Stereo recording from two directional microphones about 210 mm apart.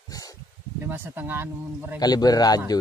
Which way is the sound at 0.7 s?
10° right (ahead or behind).